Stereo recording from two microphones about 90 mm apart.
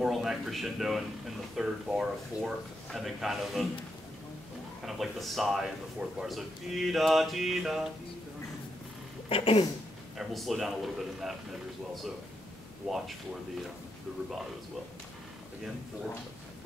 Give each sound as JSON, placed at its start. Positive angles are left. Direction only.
{"t": 0.0, "sound": "a man's voice", "side_deg": 0}
{"t": 4.8, "sound": "a man's voice", "side_deg": 0}
{"t": 9.3, "sound": "speech", "side_deg": 90}
{"t": 10.1, "sound": "a man's voice", "side_deg": 0}
{"t": 12.8, "sound": "a man's voice", "side_deg": 0}